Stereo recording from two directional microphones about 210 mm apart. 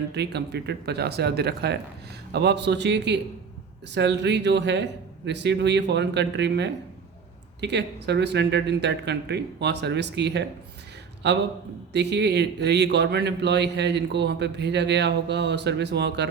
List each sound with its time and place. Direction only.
0.1 s a man's voice: 55° right (ahead or behind)